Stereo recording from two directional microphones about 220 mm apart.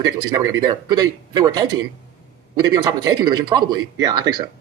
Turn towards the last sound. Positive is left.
turn(degrees=-20)  # may be behind; listen again after turning